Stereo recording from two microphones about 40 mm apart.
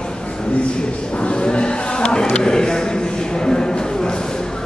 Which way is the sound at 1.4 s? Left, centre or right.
Left.